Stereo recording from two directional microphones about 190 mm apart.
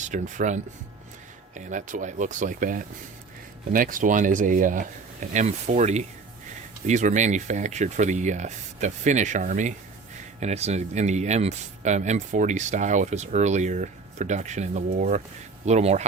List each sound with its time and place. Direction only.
0.0 s speech: 40° right (ahead or behind)